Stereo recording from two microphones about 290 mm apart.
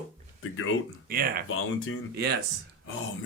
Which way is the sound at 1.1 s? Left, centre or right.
Right.